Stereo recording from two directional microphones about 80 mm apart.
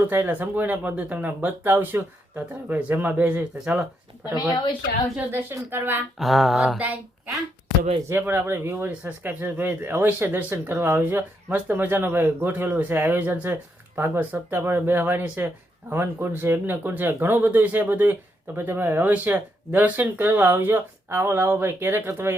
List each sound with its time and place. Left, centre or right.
0.0 s speech: right
4.4 s speech: left
5.3 s speech: right
6.1 s a sound: centre
8.1 s speech: right